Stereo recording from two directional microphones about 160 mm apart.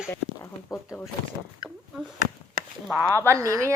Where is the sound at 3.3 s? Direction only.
20° right (ahead or behind).